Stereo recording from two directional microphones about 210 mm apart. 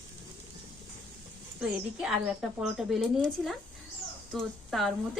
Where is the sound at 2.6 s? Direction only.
Centre (ahead or behind).